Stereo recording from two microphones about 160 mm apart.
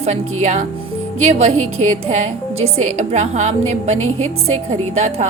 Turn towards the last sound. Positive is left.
turn(degrees=-45)  # may be behind; listen again after turning